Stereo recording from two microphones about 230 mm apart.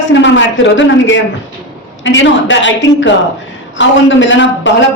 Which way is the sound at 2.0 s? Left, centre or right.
Left.